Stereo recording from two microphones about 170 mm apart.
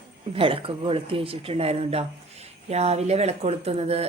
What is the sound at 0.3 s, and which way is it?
A woman's voice, 30° right (ahead or behind).